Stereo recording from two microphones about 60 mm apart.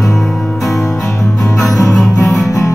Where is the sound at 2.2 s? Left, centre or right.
Left.